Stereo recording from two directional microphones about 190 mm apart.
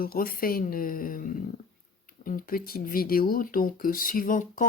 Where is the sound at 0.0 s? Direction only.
50° left (ahead or behind).